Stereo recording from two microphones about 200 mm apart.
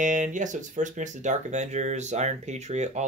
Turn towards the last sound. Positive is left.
turn(degrees=-35)  # may be behind; listen again after turning